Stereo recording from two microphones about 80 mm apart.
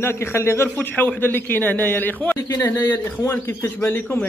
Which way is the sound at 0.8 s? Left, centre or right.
Left.